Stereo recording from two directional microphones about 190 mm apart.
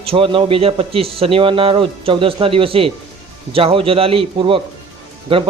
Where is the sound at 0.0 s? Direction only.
30° right (ahead or behind).